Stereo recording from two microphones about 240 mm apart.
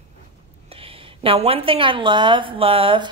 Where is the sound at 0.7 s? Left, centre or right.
Right.